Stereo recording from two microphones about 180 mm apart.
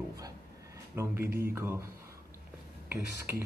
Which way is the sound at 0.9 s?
15° right (ahead or behind).